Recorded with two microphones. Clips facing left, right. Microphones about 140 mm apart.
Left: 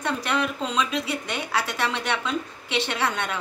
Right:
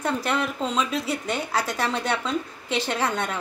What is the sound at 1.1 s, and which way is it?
A woman's voice, 35° right (ahead or behind).